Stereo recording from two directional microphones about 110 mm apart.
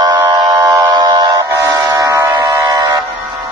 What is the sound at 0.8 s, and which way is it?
Buzzer, 30° right (ahead or behind).